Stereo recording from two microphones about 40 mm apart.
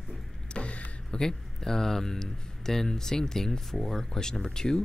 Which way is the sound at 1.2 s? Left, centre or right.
Centre.